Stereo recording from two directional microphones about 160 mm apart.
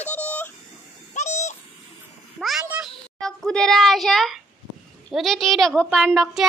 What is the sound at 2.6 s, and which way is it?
Meow, 10° right (ahead or behind).